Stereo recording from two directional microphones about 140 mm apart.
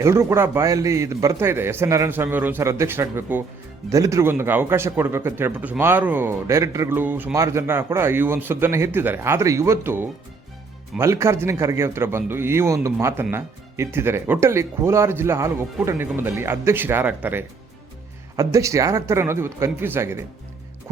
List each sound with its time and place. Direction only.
0.0 s a man's voice: 20° right (ahead or behind)